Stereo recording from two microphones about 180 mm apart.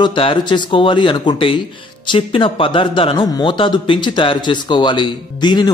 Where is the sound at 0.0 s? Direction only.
25° left (ahead or behind).